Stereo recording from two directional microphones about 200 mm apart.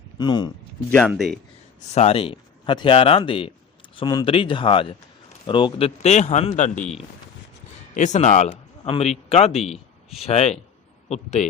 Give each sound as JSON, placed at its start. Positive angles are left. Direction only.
{"t": 0.2, "sound": "a man's voice", "side_deg": 20}
{"t": 0.9, "sound": "speech", "side_deg": 5}
{"t": 1.9, "sound": "a man's voice", "side_deg": 30}